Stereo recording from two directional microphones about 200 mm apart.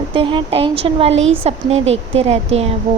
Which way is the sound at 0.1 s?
25° right (ahead or behind).